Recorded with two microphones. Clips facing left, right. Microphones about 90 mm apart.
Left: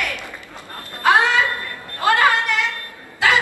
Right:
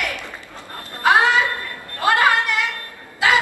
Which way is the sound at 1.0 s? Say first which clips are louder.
Even; 20° right (ahead or behind).